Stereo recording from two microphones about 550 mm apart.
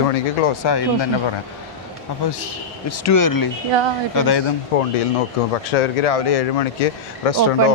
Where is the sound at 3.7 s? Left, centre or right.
Right.